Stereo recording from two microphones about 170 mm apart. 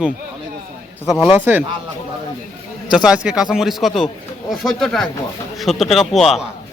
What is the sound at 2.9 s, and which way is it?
Speech, 5° right (ahead or behind).